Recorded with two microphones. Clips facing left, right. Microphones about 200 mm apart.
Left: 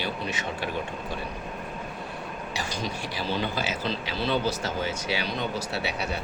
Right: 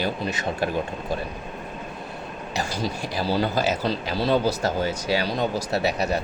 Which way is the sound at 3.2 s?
40° right (ahead or behind).